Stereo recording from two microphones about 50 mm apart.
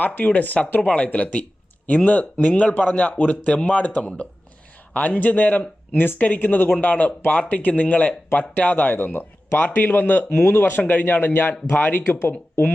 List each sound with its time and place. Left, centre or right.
0.0 s speech: left
6.7 s speech: left
10.4 s speech: left